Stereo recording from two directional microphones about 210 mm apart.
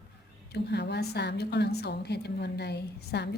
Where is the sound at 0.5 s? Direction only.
55° left (ahead or behind).